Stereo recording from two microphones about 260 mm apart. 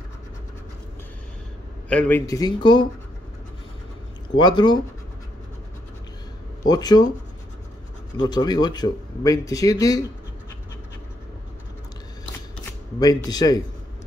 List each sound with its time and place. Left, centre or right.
1.9 s speech: centre
4.4 s speech: centre
6.7 s speech: centre
8.2 s speech: centre
13.0 s speech: centre